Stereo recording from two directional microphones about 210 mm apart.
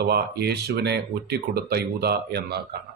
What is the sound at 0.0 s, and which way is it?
Speech, 50° right (ahead or behind).